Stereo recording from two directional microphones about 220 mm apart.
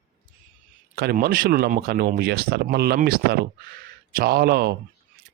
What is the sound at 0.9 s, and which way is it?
Speech, 45° right (ahead or behind).